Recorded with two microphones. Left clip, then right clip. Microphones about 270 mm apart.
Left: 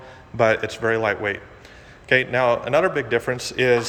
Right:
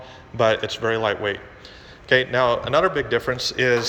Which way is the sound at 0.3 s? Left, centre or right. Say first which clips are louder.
Left 1 dB; centre.